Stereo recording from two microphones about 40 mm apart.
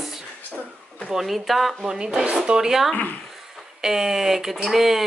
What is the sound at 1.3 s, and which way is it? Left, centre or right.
Speech, centre.